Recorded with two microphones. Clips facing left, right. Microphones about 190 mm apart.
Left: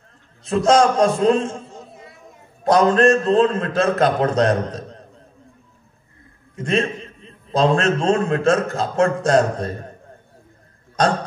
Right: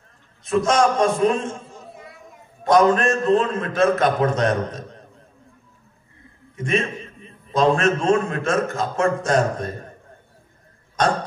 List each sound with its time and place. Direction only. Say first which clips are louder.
0.4 s a man's voice: left 3 dB; 35° left (ahead or behind)
6.6 s a man's voice: left 2 dB; 35° left (ahead or behind)